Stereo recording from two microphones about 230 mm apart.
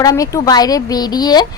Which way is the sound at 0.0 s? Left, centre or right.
Centre.